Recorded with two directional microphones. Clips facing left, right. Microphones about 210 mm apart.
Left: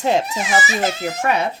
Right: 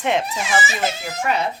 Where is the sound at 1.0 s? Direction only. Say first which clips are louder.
Left 3 dB; 55° left (ahead or behind).